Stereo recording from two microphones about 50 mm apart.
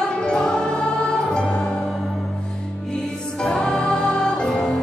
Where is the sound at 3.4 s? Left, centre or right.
Centre.